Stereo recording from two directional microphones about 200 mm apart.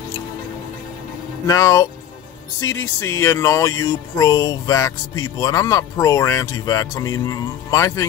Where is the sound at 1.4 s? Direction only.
15° left (ahead or behind).